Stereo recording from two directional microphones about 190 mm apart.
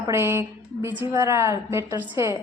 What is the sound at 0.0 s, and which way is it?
A woman's voice, 15° right (ahead or behind).